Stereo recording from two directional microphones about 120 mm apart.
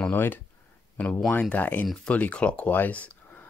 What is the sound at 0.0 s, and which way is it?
Speech, 15° left (ahead or behind).